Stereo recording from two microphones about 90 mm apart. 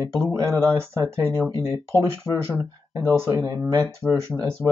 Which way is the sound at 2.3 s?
5° left (ahead or behind).